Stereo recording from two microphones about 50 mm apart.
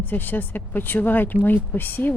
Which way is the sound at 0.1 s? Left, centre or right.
Left.